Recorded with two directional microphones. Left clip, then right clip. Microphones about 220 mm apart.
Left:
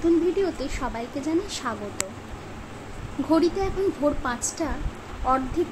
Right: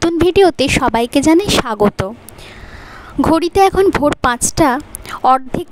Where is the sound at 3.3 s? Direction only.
50° right (ahead or behind).